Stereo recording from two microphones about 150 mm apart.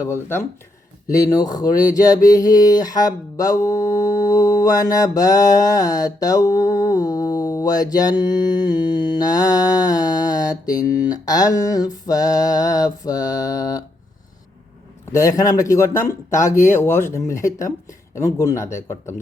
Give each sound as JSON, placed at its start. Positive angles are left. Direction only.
{"t": 0.0, "sound": "speech", "side_deg": 15}
{"t": 15.1, "sound": "speech", "side_deg": 20}